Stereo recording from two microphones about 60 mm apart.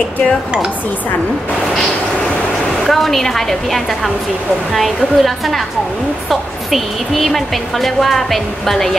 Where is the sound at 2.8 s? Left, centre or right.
Centre.